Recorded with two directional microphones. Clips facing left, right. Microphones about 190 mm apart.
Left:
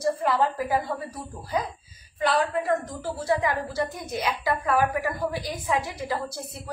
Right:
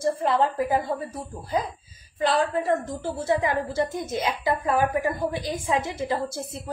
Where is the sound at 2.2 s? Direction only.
30° right (ahead or behind).